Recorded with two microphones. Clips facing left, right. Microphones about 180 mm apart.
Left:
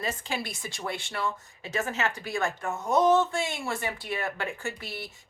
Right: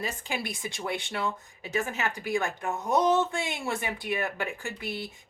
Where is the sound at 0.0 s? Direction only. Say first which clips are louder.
Left 1 dB; 15° right (ahead or behind).